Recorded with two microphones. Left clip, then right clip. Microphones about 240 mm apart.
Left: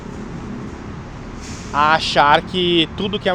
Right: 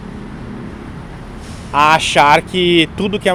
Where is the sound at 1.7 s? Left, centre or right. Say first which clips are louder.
Right 4 dB; right.